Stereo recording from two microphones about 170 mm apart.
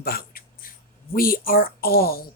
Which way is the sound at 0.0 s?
60° left (ahead or behind).